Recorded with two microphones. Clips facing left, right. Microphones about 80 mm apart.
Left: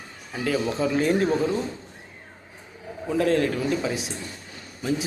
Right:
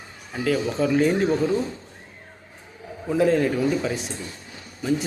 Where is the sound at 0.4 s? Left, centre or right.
Centre.